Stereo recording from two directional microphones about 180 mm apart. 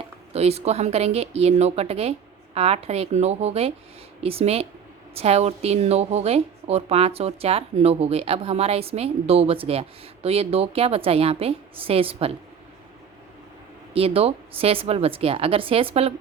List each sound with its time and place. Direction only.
0.0 s speech: 35° right (ahead or behind)
13.9 s speech: 30° right (ahead or behind)